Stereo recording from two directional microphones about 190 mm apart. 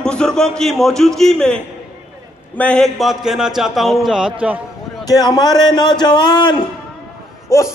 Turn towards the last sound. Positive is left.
turn(degrees=15)  # may be behind; listen again after turning